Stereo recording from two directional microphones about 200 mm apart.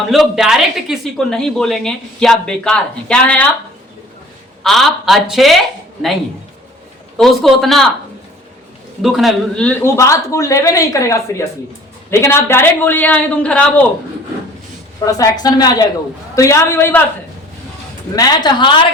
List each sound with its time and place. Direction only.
0.1 s a woman's voice: centre (ahead or behind)
4.6 s a woman's voice: centre (ahead or behind)
7.2 s a woman's voice: centre (ahead or behind)
9.0 s a man's voice: centre (ahead or behind)
15.0 s a woman's voice: 15° left (ahead or behind)
18.2 s a woman's voice: 20° left (ahead or behind)